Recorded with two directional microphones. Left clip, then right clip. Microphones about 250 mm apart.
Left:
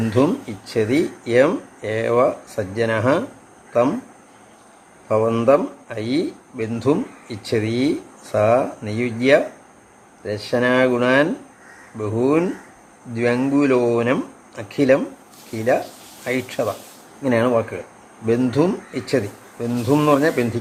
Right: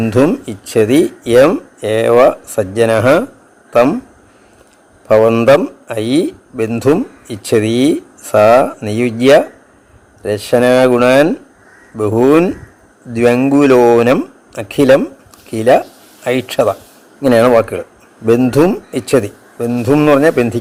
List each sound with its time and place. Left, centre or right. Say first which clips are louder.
0.1 s a man's voice: right 6 dB; right
5.0 s a man's voice: right 9 dB; right